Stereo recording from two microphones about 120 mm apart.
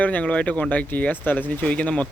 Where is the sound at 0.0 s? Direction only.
10° left (ahead or behind).